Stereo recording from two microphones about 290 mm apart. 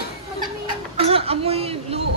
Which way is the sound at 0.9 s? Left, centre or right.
Centre.